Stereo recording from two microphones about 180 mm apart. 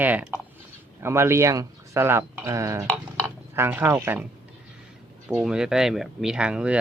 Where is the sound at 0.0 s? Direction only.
10° right (ahead or behind).